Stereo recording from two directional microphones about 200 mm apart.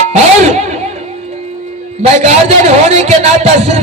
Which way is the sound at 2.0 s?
35° right (ahead or behind).